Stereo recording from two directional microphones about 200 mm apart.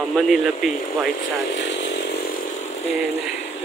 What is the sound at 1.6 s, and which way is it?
Chainsaw, 60° left (ahead or behind).